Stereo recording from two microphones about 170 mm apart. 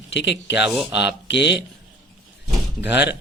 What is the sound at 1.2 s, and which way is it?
Speech, 90° left.